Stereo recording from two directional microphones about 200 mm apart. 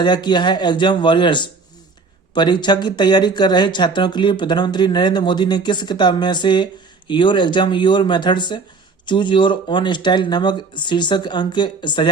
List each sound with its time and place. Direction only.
0.0 s speech: 20° left (ahead or behind)